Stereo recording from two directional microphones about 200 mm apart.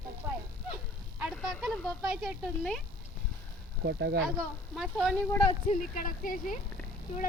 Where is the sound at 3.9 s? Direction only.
55° right (ahead or behind).